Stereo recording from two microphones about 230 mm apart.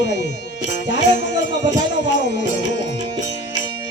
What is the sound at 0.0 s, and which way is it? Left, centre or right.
Speech, left.